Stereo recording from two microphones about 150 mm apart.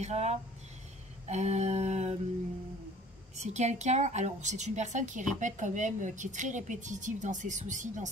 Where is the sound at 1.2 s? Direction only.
50° right (ahead or behind).